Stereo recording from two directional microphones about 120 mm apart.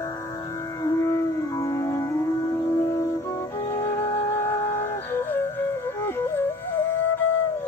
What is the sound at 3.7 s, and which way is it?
Music, 20° left (ahead or behind).